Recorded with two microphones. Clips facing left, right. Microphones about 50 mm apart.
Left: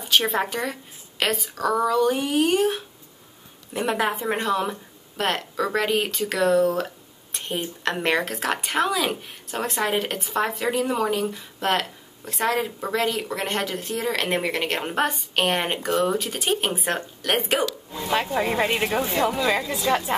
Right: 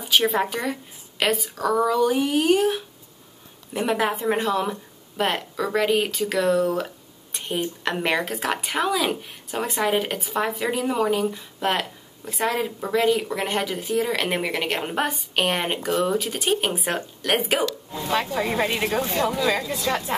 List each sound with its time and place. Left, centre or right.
0.0 s a woman's voice: centre
17.9 s speech: centre